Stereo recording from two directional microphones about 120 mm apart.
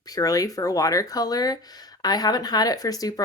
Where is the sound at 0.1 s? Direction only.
30° left (ahead or behind).